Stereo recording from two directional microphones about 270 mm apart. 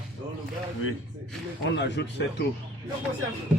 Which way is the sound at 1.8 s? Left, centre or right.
Left.